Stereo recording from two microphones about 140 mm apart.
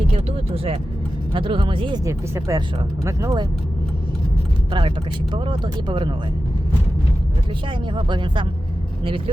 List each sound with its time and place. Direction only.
0.1 s speech: 45° right (ahead or behind)
2.0 s speech: 20° right (ahead or behind)
5.3 s speech: 35° right (ahead or behind)
7.7 s speech: 35° right (ahead or behind)